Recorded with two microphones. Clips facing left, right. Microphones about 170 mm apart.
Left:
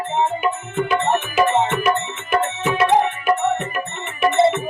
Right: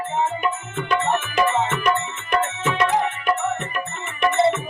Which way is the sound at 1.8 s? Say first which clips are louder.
Left 2 dB; 5° left (ahead or behind).